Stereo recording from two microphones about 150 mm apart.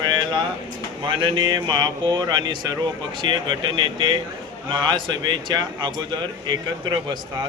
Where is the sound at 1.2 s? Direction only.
35° right (ahead or behind).